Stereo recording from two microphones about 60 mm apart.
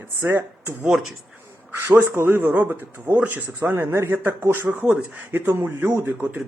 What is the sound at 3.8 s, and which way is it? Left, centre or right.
Speech, right.